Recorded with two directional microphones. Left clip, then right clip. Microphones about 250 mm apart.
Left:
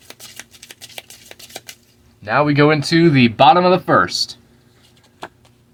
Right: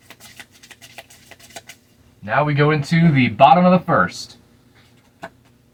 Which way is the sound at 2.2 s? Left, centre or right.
Left.